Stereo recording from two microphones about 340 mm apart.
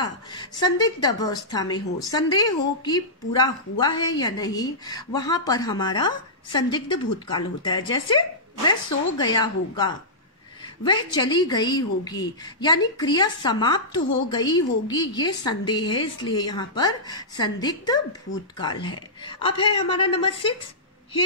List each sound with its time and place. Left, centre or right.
0.0 s a woman's voice: centre